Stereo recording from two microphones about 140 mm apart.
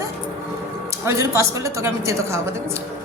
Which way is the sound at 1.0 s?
20° right (ahead or behind).